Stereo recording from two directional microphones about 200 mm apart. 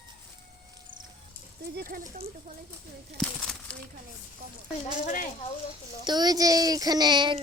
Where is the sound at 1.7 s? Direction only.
45° right (ahead or behind).